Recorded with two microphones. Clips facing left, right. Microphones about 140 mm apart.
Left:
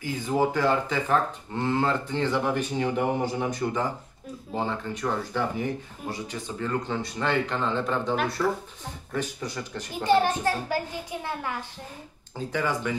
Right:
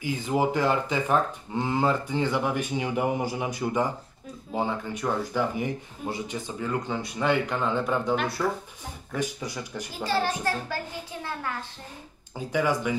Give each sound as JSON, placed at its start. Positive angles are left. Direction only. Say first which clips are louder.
{"t": 0.0, "sound": "speech", "louder": "even", "side_deg": -15}
{"t": 10.0, "sound": "a child's voice", "louder": "left 5 dB", "side_deg": 15}
{"t": 12.4, "sound": "speech", "louder": "right 2 dB", "side_deg": -10}